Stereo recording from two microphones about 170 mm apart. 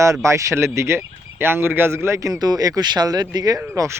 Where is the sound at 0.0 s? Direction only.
15° right (ahead or behind).